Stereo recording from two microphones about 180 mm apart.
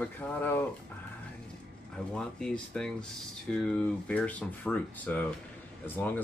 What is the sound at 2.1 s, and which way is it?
Speech, 5° left (ahead or behind).